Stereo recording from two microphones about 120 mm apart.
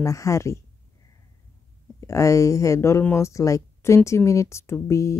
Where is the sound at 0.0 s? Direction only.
25° left (ahead or behind).